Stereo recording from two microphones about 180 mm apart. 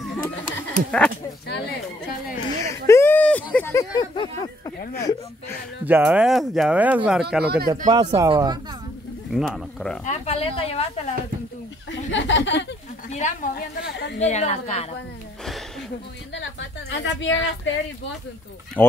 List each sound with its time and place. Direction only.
0.6 s speech: 5° left (ahead or behind)
1.5 s speech: 60° left (ahead or behind)
2.9 s a sound: 10° left (ahead or behind)
3.5 s speech: 15° left (ahead or behind)
4.9 s speech: 15° left (ahead or behind)
5.9 s speech: 10° right (ahead or behind)
7.4 s speech: 60° right (ahead or behind)
7.9 s speech: 25° right (ahead or behind)
9.3 s speech: centre (ahead or behind)
10.0 s a woman's voice: 35° left (ahead or behind)
11.9 s speech: 90° left
13.1 s a woman's voice: 45° left (ahead or behind)
16.3 s a woman's voice: 85° left
18.8 s speech: 10° left (ahead or behind)